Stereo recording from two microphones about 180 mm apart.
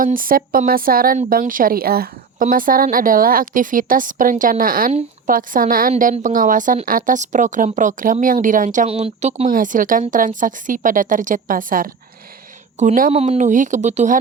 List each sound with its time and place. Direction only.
0.0 s a woman's voice: 50° right (ahead or behind)
9.5 s a woman's voice: 50° right (ahead or behind)